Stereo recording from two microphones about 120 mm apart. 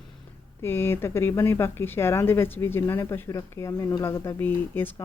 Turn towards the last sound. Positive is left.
turn(degrees=15)  # may be behind; listen again after turning